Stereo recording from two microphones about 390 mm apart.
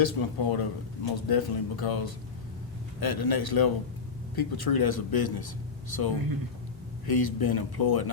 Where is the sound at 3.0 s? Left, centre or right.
Left.